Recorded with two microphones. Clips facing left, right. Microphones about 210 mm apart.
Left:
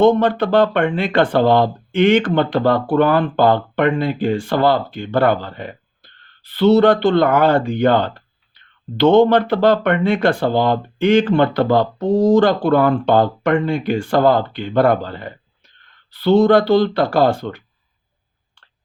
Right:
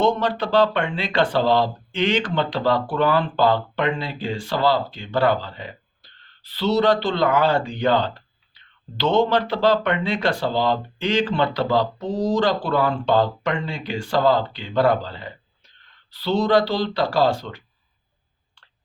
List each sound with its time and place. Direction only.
0.0 s speech: 55° left (ahead or behind)